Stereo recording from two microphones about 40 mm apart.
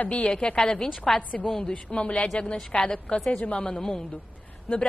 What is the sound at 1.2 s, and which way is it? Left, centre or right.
Speech, left.